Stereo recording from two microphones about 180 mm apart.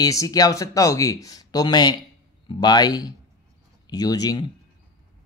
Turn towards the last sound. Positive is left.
turn(degrees=20)  # may be behind; listen again after turning